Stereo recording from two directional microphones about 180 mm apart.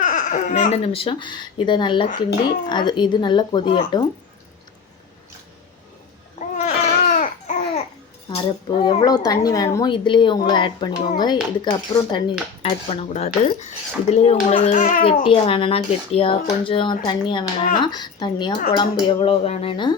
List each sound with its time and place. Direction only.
0.0 s speech: 45° left (ahead or behind); by 4.0 s 25° left (ahead or behind)
6.6 s baby cry: 40° left (ahead or behind)
8.3 s speech: 30° left (ahead or behind); by 15.0 s 50° left (ahead or behind)
15.0 s speech: 30° left (ahead or behind)